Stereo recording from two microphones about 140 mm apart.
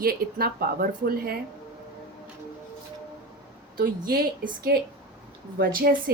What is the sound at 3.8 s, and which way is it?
Speech, 90° right.